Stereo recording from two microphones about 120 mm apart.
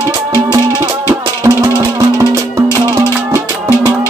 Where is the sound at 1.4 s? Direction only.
30° right (ahead or behind).